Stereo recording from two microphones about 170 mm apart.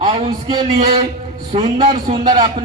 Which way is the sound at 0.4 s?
30° right (ahead or behind).